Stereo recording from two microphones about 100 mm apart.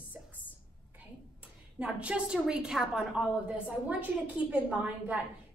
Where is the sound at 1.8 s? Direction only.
10° right (ahead or behind).